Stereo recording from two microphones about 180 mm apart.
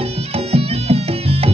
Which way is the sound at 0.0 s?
35° right (ahead or behind).